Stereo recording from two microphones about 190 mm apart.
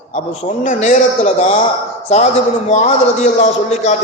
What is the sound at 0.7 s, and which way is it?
Speech, 40° left (ahead or behind).